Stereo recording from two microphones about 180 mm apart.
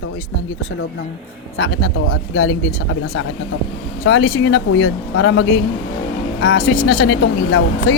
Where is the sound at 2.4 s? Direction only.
90° left.